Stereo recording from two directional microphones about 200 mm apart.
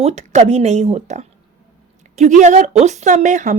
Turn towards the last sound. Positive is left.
turn(degrees=-40)  # may be behind; listen again after turning